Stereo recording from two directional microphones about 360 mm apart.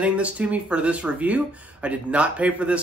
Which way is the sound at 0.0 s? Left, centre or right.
Centre.